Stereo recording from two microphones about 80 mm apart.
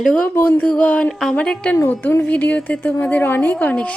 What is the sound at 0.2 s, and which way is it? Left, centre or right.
Speech, left.